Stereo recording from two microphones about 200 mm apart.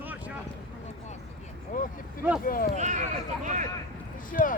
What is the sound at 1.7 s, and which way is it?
Speech, 40° left (ahead or behind).